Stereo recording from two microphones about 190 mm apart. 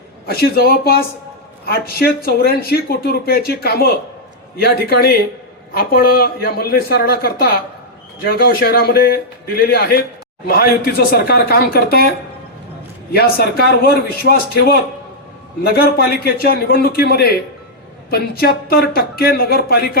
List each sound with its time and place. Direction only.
0.3 s a man's voice: 55° left (ahead or behind)
13.1 s speech: 55° left (ahead or behind)